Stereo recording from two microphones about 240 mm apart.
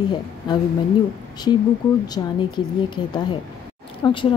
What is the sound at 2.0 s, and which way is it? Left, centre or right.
Speech, centre.